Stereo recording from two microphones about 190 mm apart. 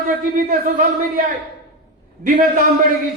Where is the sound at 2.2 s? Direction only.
45° right (ahead or behind).